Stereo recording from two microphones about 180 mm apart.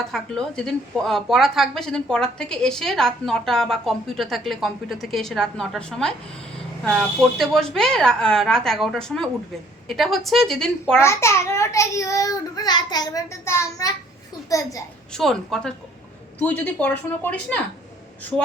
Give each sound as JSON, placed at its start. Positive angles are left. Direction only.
{"t": 0.0, "sound": "a woman's voice", "side_deg": 5}
{"t": 11.0, "sound": "a child's voice", "side_deg": 15}
{"t": 15.1, "sound": "a woman's voice", "side_deg": 0}